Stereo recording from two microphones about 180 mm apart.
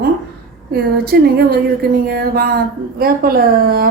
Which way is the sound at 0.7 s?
60° right (ahead or behind).